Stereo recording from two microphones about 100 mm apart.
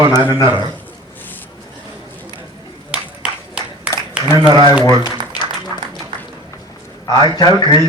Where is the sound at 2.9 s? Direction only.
10° right (ahead or behind).